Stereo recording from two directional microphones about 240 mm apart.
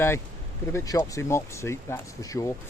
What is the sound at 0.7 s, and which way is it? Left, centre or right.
Speech, centre.